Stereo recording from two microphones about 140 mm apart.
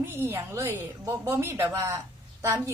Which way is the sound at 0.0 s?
15° right (ahead or behind).